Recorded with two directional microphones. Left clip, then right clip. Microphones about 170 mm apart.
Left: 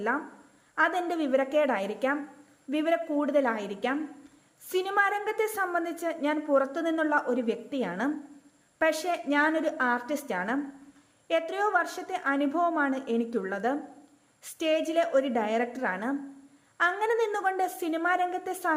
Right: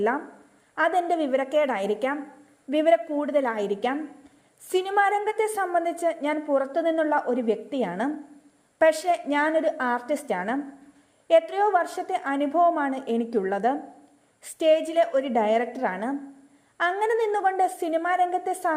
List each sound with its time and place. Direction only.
0.8 s a woman's voice: 15° right (ahead or behind)